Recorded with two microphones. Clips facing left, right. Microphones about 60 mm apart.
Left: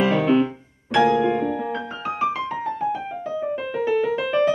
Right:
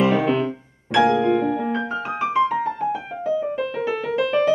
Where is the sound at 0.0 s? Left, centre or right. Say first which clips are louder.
Even; centre.